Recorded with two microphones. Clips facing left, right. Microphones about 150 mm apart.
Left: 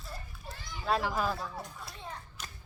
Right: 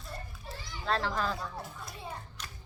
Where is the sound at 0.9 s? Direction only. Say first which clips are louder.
Left 1 dB; 10° left (ahead or behind).